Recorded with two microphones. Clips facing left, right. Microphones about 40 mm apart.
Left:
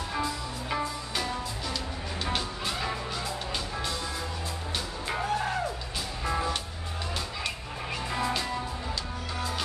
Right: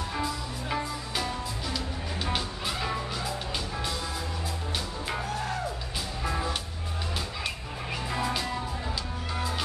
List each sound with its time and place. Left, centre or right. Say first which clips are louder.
0.1 s music: even; centre
5.2 s music: left 6 dB; left
6.2 s music: left 2 dB; centre